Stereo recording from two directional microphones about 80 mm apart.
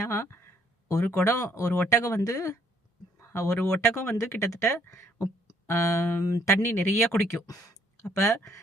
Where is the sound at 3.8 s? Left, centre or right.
Left.